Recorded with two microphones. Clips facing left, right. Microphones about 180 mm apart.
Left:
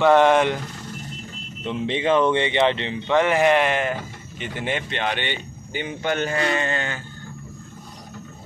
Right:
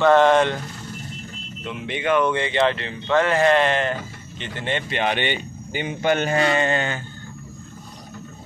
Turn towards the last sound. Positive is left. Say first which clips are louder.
# right 3 dB
turn(degrees=-20)  # may be behind; listen again after turning